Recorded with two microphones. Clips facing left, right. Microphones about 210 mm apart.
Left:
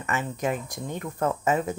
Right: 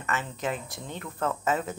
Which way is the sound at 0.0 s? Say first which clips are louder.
Left 3 dB; 15° left (ahead or behind).